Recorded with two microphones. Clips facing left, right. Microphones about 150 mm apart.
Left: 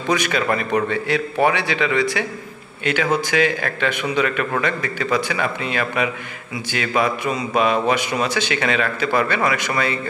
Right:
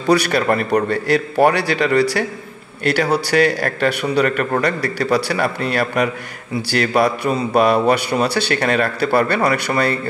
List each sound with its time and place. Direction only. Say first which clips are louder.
0.0 s a man's voice: right 5 dB; 35° right (ahead or behind)